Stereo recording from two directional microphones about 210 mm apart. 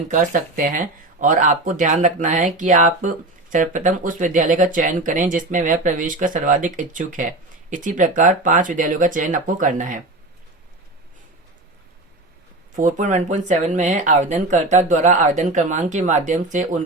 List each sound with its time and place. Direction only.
0.1 s speech: 40° right (ahead or behind)
12.7 s speech: 35° right (ahead or behind)